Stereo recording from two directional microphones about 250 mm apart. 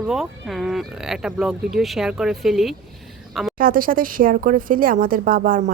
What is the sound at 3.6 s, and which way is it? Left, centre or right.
Speech, right.